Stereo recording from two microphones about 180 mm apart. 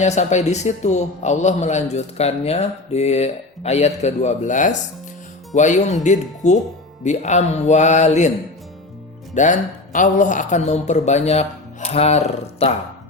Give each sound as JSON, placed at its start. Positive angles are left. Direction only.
{"t": 0.0, "sound": "a man's voice", "side_deg": 40}
{"t": 9.3, "sound": "a man's voice", "side_deg": 45}